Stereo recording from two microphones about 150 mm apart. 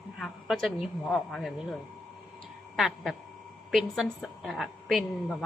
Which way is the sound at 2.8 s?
Centre (ahead or behind).